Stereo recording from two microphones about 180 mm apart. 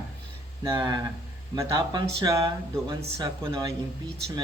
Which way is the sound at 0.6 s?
25° right (ahead or behind).